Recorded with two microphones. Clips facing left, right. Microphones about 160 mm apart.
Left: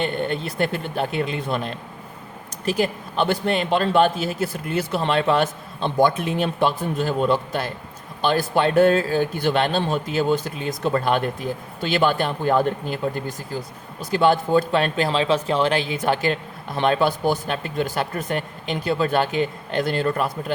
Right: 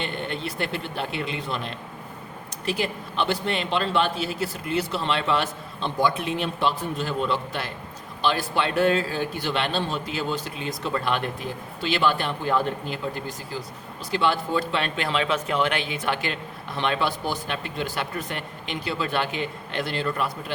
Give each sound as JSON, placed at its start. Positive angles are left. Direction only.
{"t": 0.0, "sound": "speech", "side_deg": 45}
{"t": 14.0, "sound": "speech", "side_deg": 45}